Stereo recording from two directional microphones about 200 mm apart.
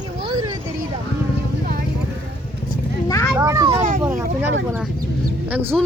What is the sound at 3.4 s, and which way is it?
Speech, 15° right (ahead or behind).